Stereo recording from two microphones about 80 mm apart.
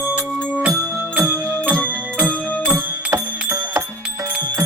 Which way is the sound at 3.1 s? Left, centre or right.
Right.